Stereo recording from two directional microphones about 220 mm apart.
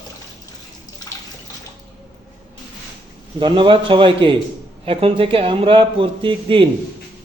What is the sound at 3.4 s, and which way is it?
Speech, 20° right (ahead or behind).